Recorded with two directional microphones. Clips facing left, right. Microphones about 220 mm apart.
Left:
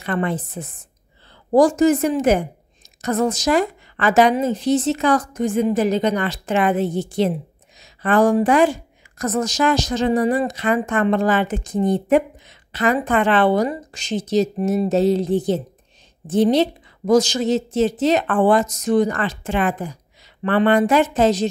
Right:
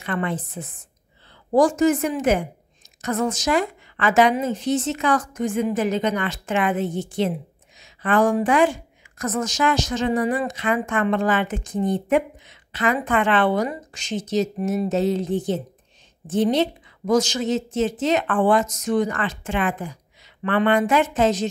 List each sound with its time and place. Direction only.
0.0 s a woman's voice: 40° left (ahead or behind)